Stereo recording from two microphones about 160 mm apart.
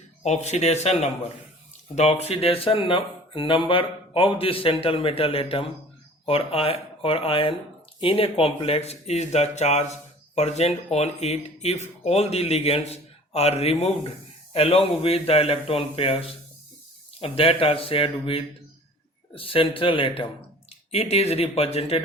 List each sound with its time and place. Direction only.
0.2 s a man's voice: 45° left (ahead or behind)